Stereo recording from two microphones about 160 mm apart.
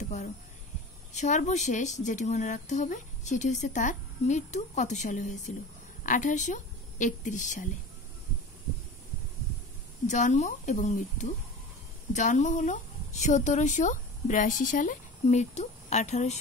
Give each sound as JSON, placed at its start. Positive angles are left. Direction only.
{"t": 1.1, "sound": "a woman's voice", "side_deg": 45}
{"t": 10.0, "sound": "a woman's voice", "side_deg": 50}